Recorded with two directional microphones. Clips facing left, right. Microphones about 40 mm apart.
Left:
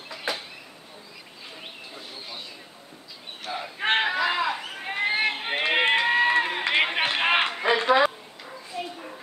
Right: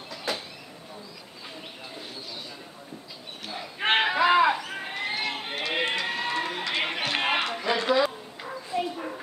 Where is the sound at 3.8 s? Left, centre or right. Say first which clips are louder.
Even; centre.